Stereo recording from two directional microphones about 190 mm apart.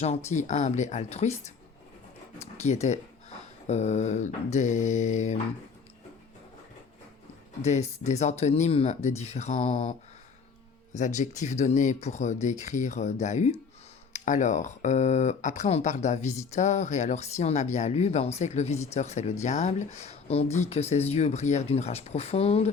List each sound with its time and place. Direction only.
0.3 s speech: 40° left (ahead or behind)
7.6 s speech: 35° left (ahead or behind)
10.9 s speech: 40° left (ahead or behind)